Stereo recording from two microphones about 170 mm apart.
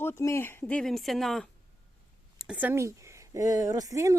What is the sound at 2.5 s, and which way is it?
Speech, 10° right (ahead or behind).